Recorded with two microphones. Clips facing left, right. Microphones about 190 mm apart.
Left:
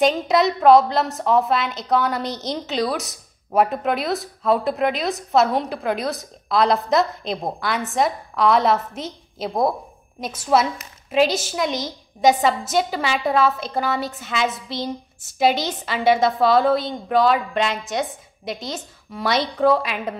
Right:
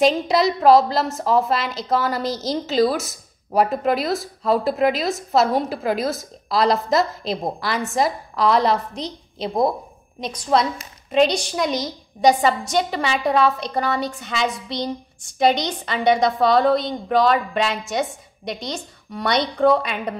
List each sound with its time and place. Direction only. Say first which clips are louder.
0.0 s a woman's voice: even; centre (ahead or behind)